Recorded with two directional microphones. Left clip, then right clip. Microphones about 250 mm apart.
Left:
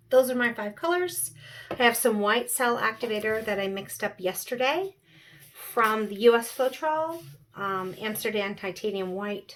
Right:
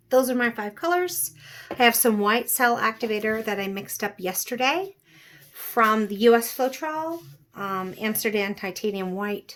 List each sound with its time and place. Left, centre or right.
0.1 s speech: right